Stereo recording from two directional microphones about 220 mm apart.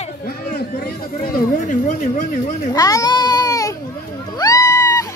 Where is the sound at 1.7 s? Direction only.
35° left (ahead or behind).